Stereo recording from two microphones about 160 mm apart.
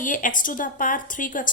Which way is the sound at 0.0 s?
55° left (ahead or behind).